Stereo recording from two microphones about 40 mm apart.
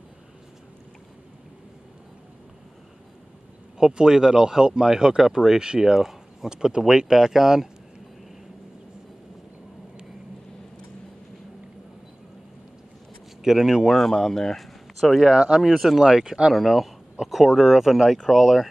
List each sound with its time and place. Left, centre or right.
3.7 s speech: centre
6.5 s speech: centre
13.4 s speech: centre
13.9 s speech: centre
15.0 s speech: centre
15.2 s speech: right
16.5 s speech: centre